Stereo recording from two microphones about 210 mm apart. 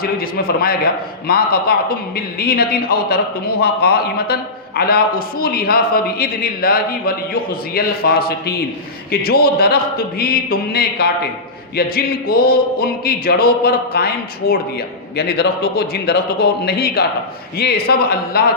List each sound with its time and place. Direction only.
0.0 s a man's voice: 45° left (ahead or behind)